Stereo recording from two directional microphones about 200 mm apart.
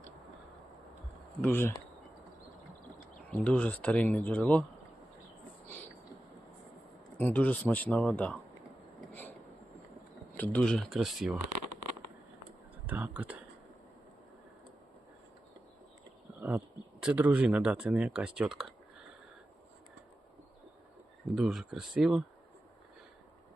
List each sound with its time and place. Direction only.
1.4 s speech: 10° left (ahead or behind)
3.2 s speech: 5° left (ahead or behind)
7.2 s speech: 10° left (ahead or behind)
9.0 s a sound: 10° left (ahead or behind)
10.3 s speech: 5° left (ahead or behind)
12.9 s speech: 5° right (ahead or behind)
16.4 s speech: 5° right (ahead or behind)
21.3 s speech: centre (ahead or behind)